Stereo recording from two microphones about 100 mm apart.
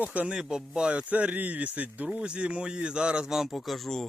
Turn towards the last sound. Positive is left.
turn(degrees=5)  # may be behind; listen again after turning